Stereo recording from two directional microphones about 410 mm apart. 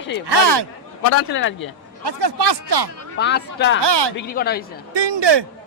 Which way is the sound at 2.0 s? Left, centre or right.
Right.